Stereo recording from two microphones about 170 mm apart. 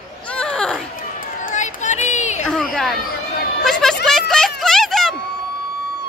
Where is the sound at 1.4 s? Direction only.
45° left (ahead or behind).